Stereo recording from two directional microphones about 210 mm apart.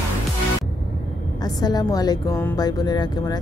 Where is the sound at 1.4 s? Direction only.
20° left (ahead or behind).